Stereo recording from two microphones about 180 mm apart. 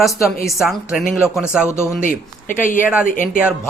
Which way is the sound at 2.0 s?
45° left (ahead or behind).